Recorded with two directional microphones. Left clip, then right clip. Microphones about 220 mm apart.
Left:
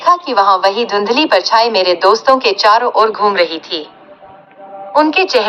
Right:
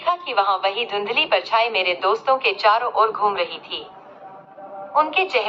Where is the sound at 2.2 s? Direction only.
45° left (ahead or behind).